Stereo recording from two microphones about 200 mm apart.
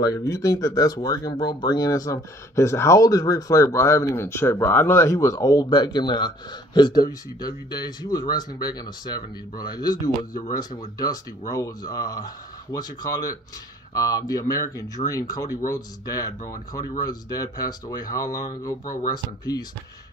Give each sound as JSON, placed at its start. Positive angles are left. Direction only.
{"t": 0.0, "sound": "speech", "side_deg": 15}
{"t": 11.5, "sound": "speech", "side_deg": 15}